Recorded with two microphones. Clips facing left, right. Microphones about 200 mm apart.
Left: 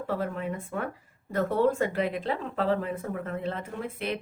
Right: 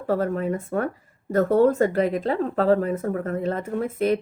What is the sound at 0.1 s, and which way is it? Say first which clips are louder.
A woman's voice: right 9 dB; 40° right (ahead or behind).